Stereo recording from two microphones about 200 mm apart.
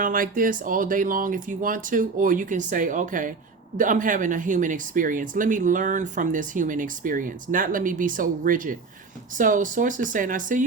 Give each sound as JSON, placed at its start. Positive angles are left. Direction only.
{"t": 0.0, "sound": "speech", "side_deg": -45}